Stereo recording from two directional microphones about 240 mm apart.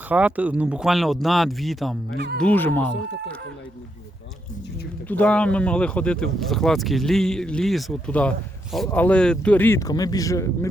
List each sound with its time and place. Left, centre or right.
0.1 s speech: centre
2.1 s speech: right
2.4 s speech: centre
5.0 s speech: centre